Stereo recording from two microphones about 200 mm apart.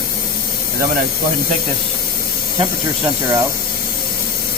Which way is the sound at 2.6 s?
15° right (ahead or behind).